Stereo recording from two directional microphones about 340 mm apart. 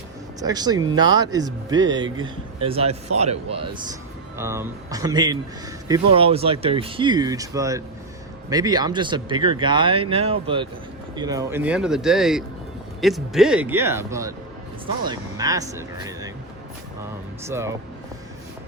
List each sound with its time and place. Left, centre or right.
0.3 s speech: centre
4.4 s speech: centre